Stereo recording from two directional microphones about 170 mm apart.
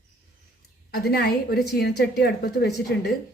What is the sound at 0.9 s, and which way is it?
A woman's voice, 70° left (ahead or behind).